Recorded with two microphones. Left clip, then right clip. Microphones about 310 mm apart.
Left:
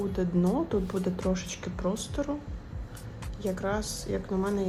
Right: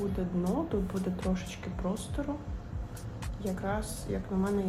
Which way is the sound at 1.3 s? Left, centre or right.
Left.